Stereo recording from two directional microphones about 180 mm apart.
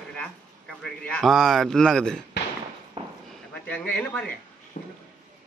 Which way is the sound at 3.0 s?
30° right (ahead or behind).